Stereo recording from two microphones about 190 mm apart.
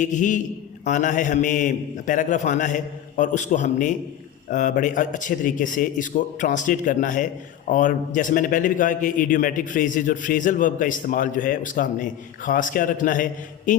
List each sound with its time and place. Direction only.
0.0 s a man's voice: 40° left (ahead or behind)
13.7 s mantra: 45° left (ahead or behind)